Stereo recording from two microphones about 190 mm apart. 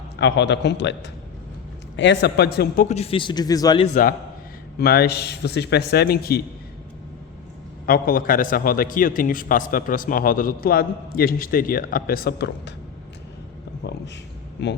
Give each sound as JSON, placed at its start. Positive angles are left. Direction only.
{"t": 0.2, "sound": "a man's voice", "side_deg": 65}
{"t": 2.8, "sound": "a man's voice", "side_deg": 35}
{"t": 4.8, "sound": "a man's voice", "side_deg": 55}
{"t": 7.9, "sound": "a man's voice", "side_deg": 50}
{"t": 14.6, "sound": "speech", "side_deg": 65}